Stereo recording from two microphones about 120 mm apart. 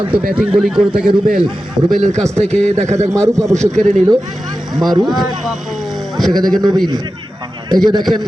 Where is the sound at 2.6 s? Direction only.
65° right (ahead or behind).